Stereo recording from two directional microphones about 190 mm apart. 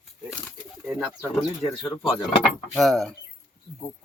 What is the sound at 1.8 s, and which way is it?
Speech, 25° left (ahead or behind).